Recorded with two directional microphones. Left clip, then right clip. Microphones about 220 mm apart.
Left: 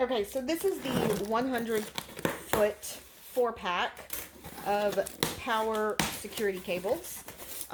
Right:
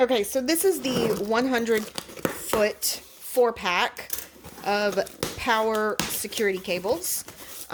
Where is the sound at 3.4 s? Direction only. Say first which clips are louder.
Right 7 dB; 45° right (ahead or behind).